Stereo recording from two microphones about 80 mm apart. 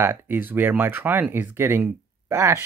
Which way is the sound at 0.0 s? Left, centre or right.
Right.